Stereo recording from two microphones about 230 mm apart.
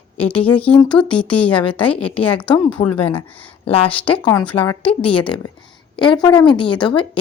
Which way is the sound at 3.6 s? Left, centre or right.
Left.